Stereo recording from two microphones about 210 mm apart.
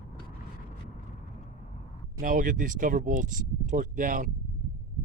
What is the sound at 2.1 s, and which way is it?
Speech, 40° right (ahead or behind).